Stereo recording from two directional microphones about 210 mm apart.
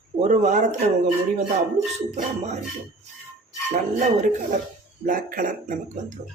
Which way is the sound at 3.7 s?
35° right (ahead or behind).